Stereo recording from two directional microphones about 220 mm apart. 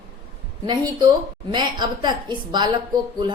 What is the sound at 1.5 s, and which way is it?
A woman's voice, 20° right (ahead or behind).